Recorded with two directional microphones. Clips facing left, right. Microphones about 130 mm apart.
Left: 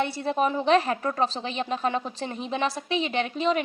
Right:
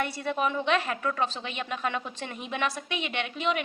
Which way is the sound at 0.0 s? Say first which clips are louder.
Left 4 dB; 30° left (ahead or behind).